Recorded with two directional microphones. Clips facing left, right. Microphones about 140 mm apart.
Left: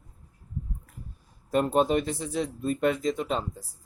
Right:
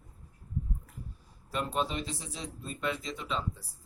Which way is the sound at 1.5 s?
50° left (ahead or behind).